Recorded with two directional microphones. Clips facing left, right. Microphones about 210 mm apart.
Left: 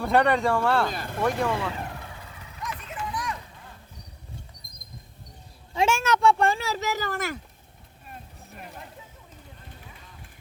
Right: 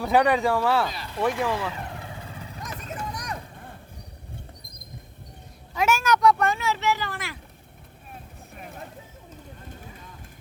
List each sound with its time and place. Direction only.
0.0 s speech: centre (ahead or behind)
0.9 s speech: 50° left (ahead or behind)
1.4 s speech: 5° right (ahead or behind)
2.2 s vehicle: 30° right (ahead or behind)
5.7 s speech: 25° left (ahead or behind); by 7.3 s 45° left (ahead or behind)